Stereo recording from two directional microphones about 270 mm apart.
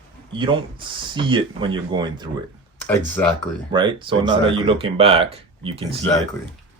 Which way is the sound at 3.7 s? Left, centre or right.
Centre.